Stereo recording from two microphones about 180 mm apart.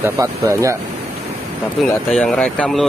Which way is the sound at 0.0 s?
15° right (ahead or behind).